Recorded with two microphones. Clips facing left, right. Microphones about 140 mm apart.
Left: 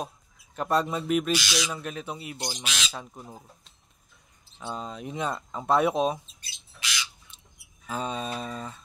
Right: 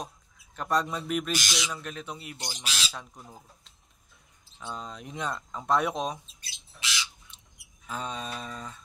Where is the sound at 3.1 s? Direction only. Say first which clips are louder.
Left 4 dB; 15° left (ahead or behind).